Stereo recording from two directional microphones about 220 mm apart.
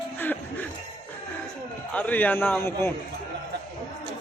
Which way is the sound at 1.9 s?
10° left (ahead or behind).